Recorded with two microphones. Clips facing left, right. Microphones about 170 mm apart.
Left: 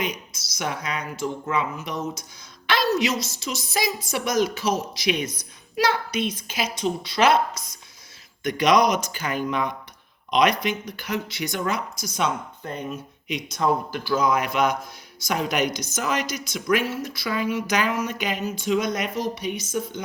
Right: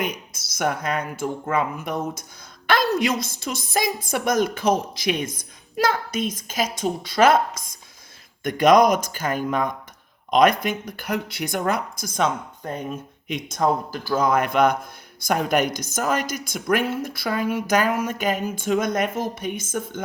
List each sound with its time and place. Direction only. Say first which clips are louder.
0.0 s a woman's voice: right 1 dB; 55° right (ahead or behind)